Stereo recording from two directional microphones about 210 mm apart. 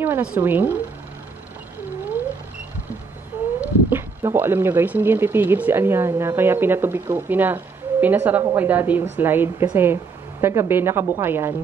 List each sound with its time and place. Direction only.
0.0 s speech: 10° right (ahead or behind)
3.6 s speech: 10° right (ahead or behind)